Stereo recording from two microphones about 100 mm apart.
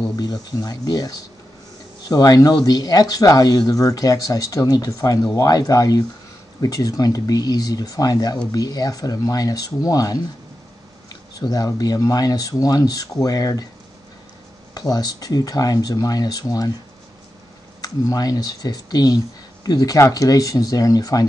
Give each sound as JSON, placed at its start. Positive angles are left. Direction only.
{"t": 0.1, "sound": "speech", "side_deg": 40}
{"t": 11.3, "sound": "speech", "side_deg": 40}
{"t": 14.7, "sound": "speech", "side_deg": 40}
{"t": 17.8, "sound": "speech", "side_deg": 40}